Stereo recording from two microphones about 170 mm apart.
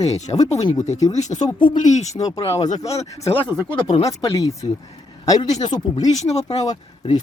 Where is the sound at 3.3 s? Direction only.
10° left (ahead or behind).